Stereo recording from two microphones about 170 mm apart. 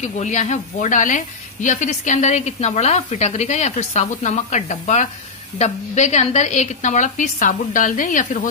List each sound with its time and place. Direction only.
0.0 s speech: 45° left (ahead or behind)